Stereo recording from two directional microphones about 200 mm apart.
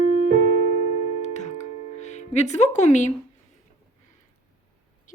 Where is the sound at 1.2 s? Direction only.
35° left (ahead or behind).